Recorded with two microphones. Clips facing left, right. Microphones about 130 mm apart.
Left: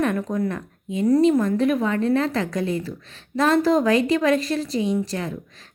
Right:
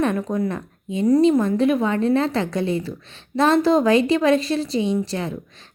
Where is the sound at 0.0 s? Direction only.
25° right (ahead or behind).